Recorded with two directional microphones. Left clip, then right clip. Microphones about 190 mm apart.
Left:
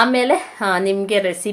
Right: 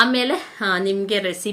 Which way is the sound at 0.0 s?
15° right (ahead or behind).